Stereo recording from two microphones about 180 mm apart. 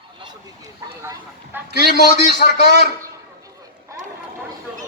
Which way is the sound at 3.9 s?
15° right (ahead or behind).